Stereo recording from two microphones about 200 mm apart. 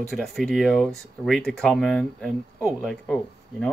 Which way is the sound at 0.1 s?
Centre (ahead or behind).